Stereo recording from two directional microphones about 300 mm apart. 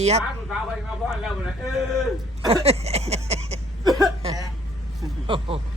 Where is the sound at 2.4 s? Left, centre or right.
Centre.